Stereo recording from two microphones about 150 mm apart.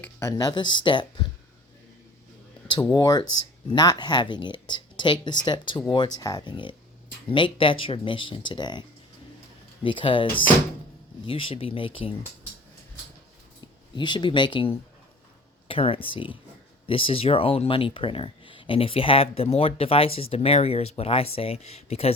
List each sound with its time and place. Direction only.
0.0 s a sound: 15° left (ahead or behind)
0.3 s speech: 30° left (ahead or behind)
2.9 s speech: 25° left (ahead or behind)
9.8 s speech: 35° left (ahead or behind)
13.9 s speech: 30° left (ahead or behind)